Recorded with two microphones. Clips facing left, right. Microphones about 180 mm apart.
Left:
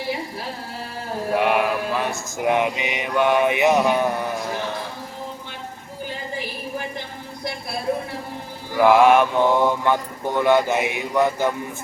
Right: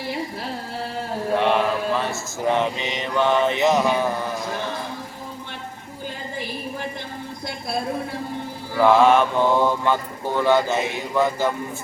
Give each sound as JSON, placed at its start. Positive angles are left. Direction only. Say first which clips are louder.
{"t": 1.4, "sound": "mantra", "louder": "left 1 dB", "side_deg": 10}
{"t": 8.7, "sound": "speech", "louder": "left 1 dB", "side_deg": 15}